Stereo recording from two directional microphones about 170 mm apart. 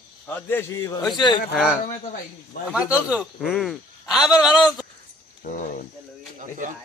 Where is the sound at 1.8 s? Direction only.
45° left (ahead or behind).